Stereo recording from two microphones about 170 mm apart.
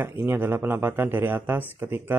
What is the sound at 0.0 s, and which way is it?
Speech, 10° right (ahead or behind).